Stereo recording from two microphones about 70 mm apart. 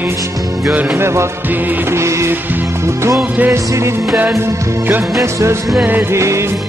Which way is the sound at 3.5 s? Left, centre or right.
Right.